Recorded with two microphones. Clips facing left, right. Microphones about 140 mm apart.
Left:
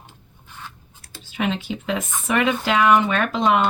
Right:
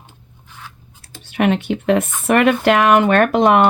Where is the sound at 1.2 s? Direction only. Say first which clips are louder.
Right 7 dB; 65° right (ahead or behind).